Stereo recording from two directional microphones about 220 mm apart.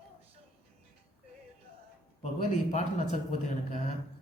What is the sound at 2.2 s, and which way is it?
A man's voice, 35° left (ahead or behind).